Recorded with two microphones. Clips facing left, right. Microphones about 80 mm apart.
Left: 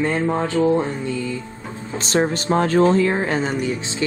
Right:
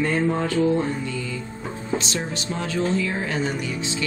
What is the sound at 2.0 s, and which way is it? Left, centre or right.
Speech, left.